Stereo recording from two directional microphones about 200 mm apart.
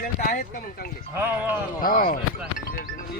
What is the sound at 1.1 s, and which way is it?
Speech, 10° right (ahead or behind).